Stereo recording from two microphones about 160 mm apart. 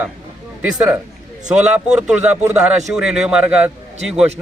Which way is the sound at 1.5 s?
5° right (ahead or behind).